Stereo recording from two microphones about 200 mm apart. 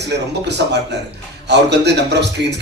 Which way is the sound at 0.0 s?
60° right (ahead or behind).